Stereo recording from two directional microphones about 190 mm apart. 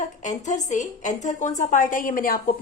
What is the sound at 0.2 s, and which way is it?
A woman's voice, 40° left (ahead or behind).